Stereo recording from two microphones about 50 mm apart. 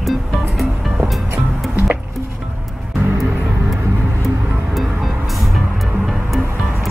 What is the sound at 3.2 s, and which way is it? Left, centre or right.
Music, right.